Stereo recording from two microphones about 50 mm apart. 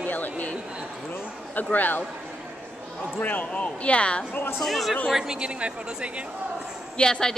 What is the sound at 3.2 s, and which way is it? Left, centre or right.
Speech, left.